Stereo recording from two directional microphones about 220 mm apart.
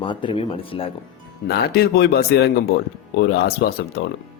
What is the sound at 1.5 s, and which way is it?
Speech, 45° left (ahead or behind).